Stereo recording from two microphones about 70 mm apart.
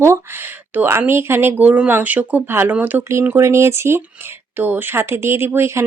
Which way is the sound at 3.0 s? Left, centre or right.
Right.